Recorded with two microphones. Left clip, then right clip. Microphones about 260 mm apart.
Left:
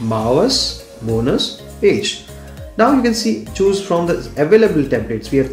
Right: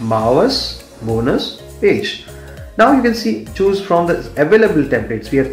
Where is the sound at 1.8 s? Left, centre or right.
Centre.